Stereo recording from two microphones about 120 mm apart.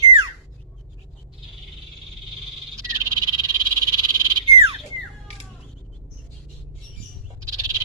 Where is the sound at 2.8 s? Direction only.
30° right (ahead or behind).